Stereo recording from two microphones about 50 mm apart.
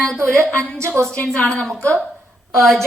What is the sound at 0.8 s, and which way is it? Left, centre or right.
Speech, right.